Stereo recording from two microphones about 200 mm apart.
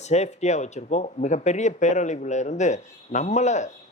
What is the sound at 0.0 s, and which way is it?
A man's voice, 35° left (ahead or behind).